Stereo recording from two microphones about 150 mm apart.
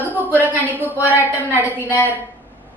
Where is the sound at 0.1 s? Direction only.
10° right (ahead or behind).